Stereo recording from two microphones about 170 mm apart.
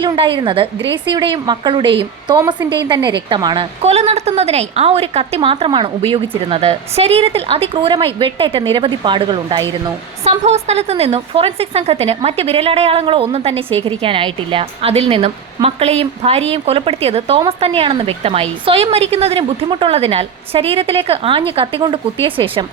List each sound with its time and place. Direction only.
0.0 s a woman's voice: 30° right (ahead or behind)
10.2 s a woman's voice: 40° right (ahead or behind)